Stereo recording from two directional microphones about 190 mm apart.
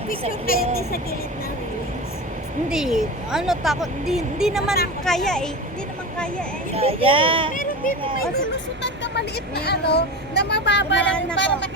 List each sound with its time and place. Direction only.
0.3 s speech: 50° left (ahead or behind)
2.6 s speech: 5° right (ahead or behind)
6.7 s speech: 30° right (ahead or behind)
7.5 s a sound: 45° left (ahead or behind)
8.8 s speech: 60° left (ahead or behind)
11.0 s speech: 5° left (ahead or behind)
11.3 s speech: 65° left (ahead or behind)